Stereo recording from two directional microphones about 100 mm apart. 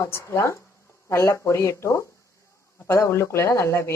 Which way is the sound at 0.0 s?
30° left (ahead or behind).